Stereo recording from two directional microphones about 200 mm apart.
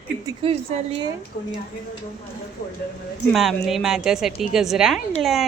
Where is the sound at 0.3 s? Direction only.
30° right (ahead or behind).